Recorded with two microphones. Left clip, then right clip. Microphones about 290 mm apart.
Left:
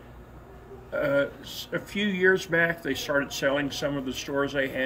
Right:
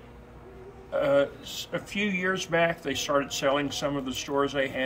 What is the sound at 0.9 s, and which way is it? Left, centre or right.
Speech, right.